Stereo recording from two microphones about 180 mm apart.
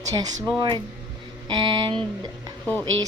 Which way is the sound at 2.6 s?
10° left (ahead or behind).